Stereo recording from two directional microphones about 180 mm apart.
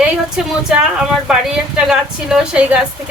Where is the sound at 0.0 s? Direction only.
5° right (ahead or behind).